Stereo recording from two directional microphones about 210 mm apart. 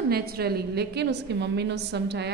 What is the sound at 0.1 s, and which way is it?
A woman's voice, 45° right (ahead or behind).